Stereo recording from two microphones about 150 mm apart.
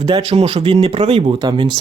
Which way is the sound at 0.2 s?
40° right (ahead or behind).